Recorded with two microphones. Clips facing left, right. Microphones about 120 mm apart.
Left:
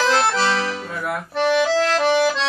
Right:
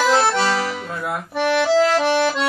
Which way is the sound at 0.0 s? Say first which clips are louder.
Right 2 dB; 10° right (ahead or behind).